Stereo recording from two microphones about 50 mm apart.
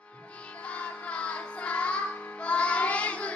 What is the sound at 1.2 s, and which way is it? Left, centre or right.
Music, left.